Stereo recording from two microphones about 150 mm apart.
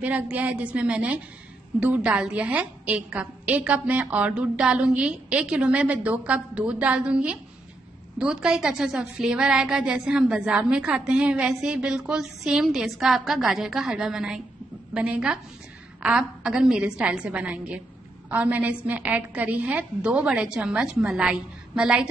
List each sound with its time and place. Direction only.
0.0 s a woman's voice: 10° right (ahead or behind)